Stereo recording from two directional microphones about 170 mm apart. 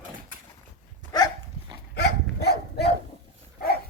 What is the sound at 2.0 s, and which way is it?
Dog, 75° left (ahead or behind).